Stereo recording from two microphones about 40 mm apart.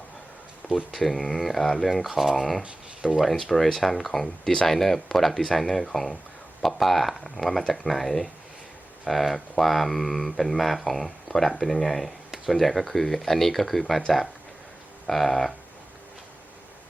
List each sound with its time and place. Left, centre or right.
0.9 s speech: centre
2.6 s speech: right
3.5 s speech: centre
15.0 s speech: centre